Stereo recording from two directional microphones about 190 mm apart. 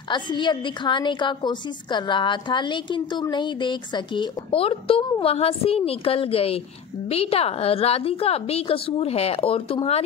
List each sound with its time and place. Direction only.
0.1 s a woman's voice: 25° left (ahead or behind)